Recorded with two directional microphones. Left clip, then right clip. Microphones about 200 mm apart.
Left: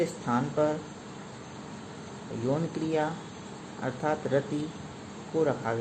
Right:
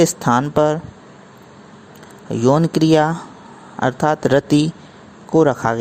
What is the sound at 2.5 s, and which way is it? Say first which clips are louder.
Speech: right 16 dB; 60° right (ahead or behind).